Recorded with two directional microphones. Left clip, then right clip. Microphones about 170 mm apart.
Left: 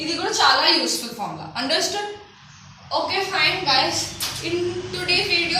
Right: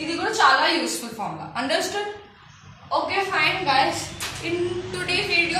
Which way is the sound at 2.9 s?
15° right (ahead or behind).